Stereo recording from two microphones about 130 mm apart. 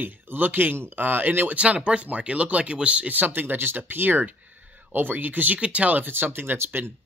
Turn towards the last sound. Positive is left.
turn(degrees=-20)  # may be behind; listen again after turning